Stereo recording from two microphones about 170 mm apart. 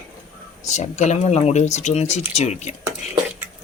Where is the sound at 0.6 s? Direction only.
45° left (ahead or behind).